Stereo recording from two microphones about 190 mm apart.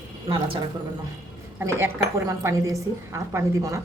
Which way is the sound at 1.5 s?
15° right (ahead or behind).